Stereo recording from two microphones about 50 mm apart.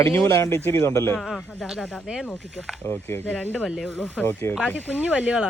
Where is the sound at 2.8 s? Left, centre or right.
Left.